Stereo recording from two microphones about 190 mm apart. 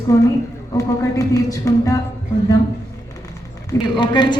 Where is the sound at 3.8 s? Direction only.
25° left (ahead or behind).